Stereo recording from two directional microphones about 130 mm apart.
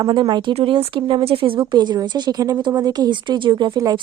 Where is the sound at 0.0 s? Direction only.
35° right (ahead or behind).